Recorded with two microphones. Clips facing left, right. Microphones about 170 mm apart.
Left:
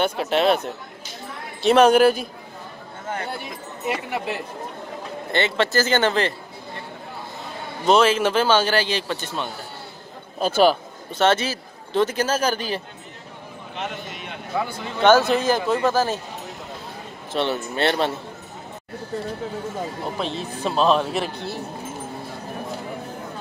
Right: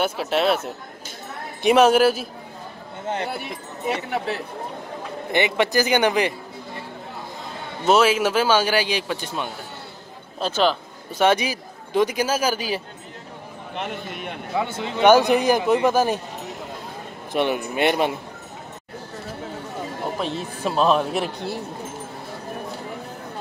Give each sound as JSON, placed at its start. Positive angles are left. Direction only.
{"t": 0.0, "sound": "speech", "side_deg": -5}
{"t": 1.6, "sound": "a man's voice", "side_deg": -10}
{"t": 3.3, "sound": "speech", "side_deg": 0}
{"t": 5.3, "sound": "a man's voice", "side_deg": -15}
{"t": 7.8, "sound": "a man's voice", "side_deg": -5}
{"t": 10.4, "sound": "speech", "side_deg": 10}
{"t": 11.1, "sound": "a man's voice", "side_deg": -10}
{"t": 13.7, "sound": "a man's voice", "side_deg": -50}
{"t": 14.6, "sound": "a man's voice", "side_deg": -20}
{"t": 17.3, "sound": "a man's voice", "side_deg": -15}
{"t": 20.2, "sound": "a man's voice", "side_deg": -10}